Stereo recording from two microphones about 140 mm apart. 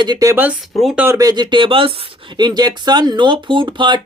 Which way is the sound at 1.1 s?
30° right (ahead or behind).